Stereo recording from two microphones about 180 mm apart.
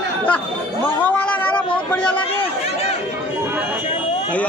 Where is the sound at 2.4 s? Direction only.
35° left (ahead or behind).